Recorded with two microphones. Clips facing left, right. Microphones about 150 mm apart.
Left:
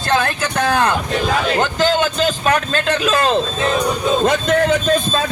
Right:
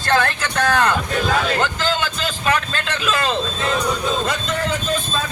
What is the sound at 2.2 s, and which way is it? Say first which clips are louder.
A man's voice: left 4 dB; 45° left (ahead or behind).